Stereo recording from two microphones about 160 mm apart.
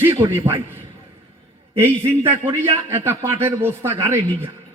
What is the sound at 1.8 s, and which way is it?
A man's voice, 15° right (ahead or behind).